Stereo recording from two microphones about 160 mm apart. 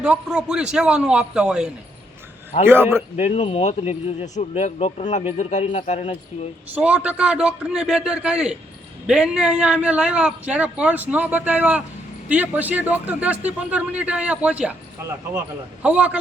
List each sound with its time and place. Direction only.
0.0 s a man's voice: 5° right (ahead or behind)
3.2 s speech: 40° left (ahead or behind)
6.7 s a man's voice: 10° right (ahead or behind)
15.8 s a man's voice: 10° right (ahead or behind)